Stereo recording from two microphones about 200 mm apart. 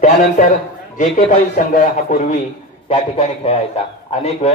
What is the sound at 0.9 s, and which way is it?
A man's voice, 40° left (ahead or behind).